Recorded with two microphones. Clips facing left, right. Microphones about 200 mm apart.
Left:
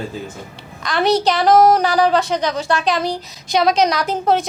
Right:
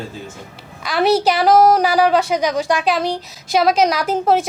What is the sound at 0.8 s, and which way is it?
A woman's voice, 5° right (ahead or behind).